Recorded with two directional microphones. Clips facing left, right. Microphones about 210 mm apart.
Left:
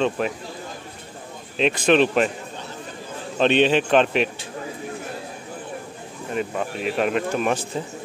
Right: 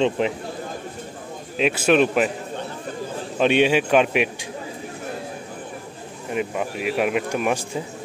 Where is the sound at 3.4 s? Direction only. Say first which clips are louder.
Even; 10° right (ahead or behind).